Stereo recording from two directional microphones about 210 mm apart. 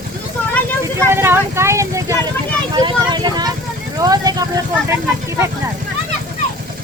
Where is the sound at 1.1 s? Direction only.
10° right (ahead or behind).